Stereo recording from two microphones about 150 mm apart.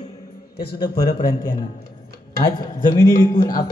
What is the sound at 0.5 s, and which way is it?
Speech, 90° left.